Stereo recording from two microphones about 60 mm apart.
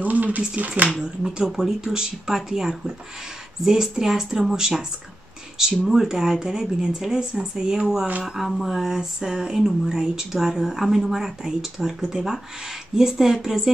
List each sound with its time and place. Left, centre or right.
0.0 s a sound: right
0.6 s speech: right
1.0 s speech: centre